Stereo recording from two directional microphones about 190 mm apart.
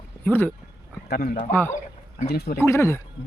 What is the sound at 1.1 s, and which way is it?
Speech, 50° left (ahead or behind).